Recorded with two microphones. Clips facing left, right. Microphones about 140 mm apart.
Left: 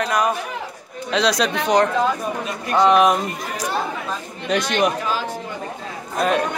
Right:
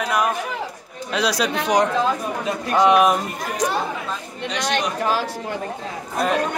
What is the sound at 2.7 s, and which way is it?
Speech, 5° right (ahead or behind).